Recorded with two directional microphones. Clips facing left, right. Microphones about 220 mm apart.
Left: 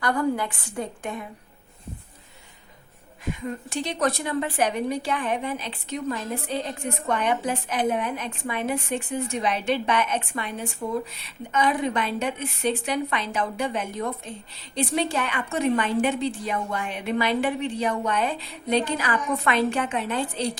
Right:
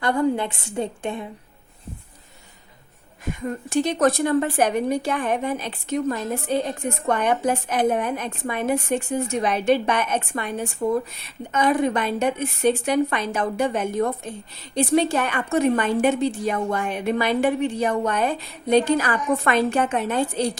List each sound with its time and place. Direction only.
0.0 s a woman's voice: 25° right (ahead or behind)
3.4 s a woman's voice: 45° right (ahead or behind)